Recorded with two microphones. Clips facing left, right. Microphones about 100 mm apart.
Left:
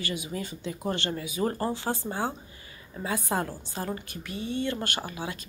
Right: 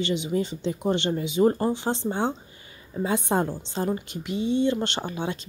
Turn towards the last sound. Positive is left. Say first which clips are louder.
# right 5 dB
turn(degrees=-25)  # may be behind; listen again after turning